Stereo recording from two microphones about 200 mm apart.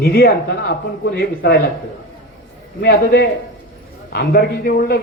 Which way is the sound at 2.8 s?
55° left (ahead or behind).